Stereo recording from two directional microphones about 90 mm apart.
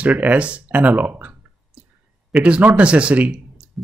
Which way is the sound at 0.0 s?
15° right (ahead or behind).